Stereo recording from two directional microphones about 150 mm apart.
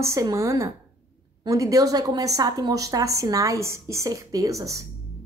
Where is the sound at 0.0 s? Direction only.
20° right (ahead or behind).